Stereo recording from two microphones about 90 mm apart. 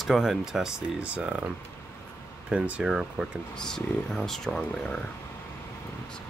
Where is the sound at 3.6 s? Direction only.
5° left (ahead or behind).